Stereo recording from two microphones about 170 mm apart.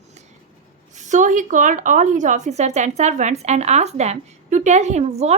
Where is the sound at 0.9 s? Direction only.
45° right (ahead or behind).